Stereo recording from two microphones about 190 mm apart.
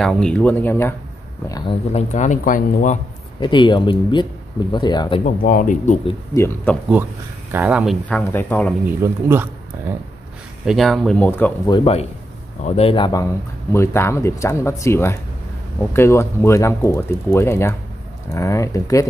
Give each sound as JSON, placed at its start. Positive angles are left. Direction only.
{"t": 0.0, "sound": "speech", "side_deg": 5}
{"t": 1.5, "sound": "speech", "side_deg": 30}
{"t": 3.3, "sound": "speech", "side_deg": 25}
{"t": 5.2, "sound": "speech", "side_deg": 45}
{"t": 6.3, "sound": "speech", "side_deg": 10}
{"t": 7.5, "sound": "speech", "side_deg": -5}
{"t": 8.2, "sound": "speech", "side_deg": 10}
{"t": 8.8, "sound": "speech", "side_deg": -10}
{"t": 10.6, "sound": "speech", "side_deg": 0}
{"t": 11.6, "sound": "speech", "side_deg": 25}